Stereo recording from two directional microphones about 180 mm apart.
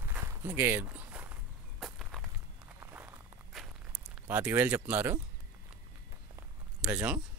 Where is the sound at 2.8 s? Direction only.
10° right (ahead or behind).